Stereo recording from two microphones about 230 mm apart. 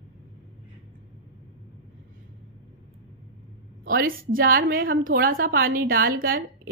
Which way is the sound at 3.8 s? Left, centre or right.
Right.